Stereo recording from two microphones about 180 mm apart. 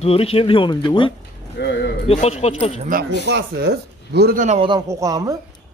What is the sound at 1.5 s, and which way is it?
Speech, 70° left (ahead or behind).